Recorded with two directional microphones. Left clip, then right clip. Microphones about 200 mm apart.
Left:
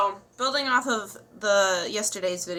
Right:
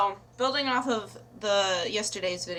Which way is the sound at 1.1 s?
25° left (ahead or behind).